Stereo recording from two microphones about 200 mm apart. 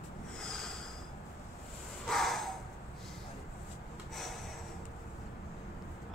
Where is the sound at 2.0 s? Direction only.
Centre (ahead or behind).